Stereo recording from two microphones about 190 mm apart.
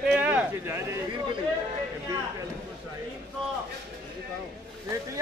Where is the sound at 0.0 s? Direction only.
5° right (ahead or behind).